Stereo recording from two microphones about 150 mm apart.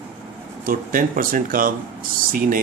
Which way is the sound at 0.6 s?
70° right (ahead or behind).